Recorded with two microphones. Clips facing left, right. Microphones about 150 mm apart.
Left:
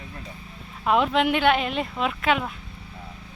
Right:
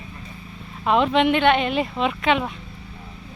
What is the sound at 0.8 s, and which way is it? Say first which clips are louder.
Speech: right 3 dB; 5° left (ahead or behind).